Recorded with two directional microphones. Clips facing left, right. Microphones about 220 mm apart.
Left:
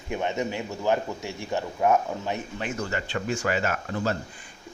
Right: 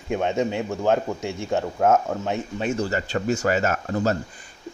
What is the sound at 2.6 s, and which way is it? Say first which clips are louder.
Speech: right 6 dB; 35° right (ahead or behind).